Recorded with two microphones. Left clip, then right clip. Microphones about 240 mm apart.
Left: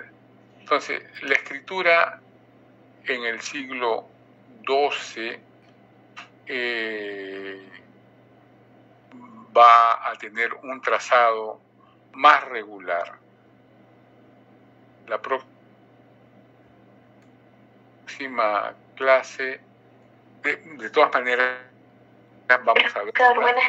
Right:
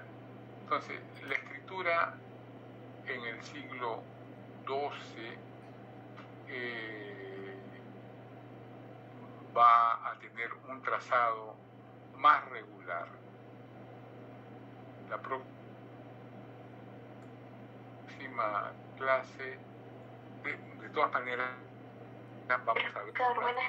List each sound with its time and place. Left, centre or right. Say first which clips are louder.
0.7 s speech: left 12 dB; left
3.1 s speech: left 14 dB; left
6.1 s a sound: left 13 dB; left
9.5 s speech: left 11 dB; left
15.0 s speech: left 12 dB; left
18.0 s speech: left 12 dB; left